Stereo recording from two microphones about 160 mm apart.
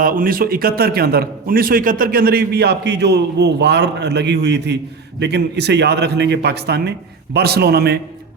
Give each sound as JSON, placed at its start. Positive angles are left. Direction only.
{"t": 0.0, "sound": "a man's voice", "side_deg": -60}